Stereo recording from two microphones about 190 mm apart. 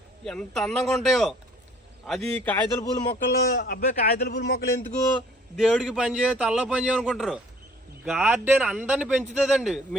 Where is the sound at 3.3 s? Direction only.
55° left (ahead or behind).